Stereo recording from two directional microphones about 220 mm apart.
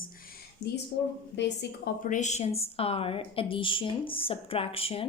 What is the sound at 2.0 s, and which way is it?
A woman's voice, 35° left (ahead or behind).